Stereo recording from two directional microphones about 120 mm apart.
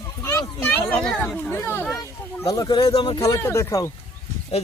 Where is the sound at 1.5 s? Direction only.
20° left (ahead or behind); by 3.2 s 40° left (ahead or behind).